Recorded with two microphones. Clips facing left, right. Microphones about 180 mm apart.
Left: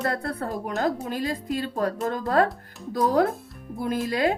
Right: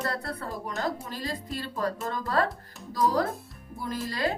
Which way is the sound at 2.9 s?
60° left (ahead or behind).